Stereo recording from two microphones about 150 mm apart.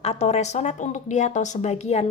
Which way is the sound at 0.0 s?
45° left (ahead or behind).